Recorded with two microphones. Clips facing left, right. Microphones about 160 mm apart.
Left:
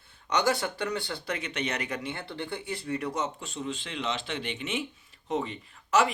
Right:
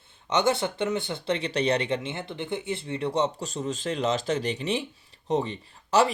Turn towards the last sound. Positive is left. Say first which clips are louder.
# right 3 dB
turn(degrees=-35)  # may be behind; listen again after turning